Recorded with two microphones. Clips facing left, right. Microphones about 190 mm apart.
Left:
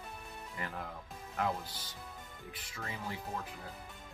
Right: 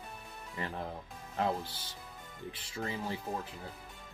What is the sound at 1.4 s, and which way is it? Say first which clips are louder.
Speech: right 3 dB; 30° right (ahead or behind).